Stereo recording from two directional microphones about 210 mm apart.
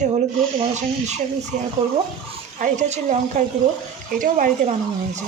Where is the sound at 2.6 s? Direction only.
35° right (ahead or behind).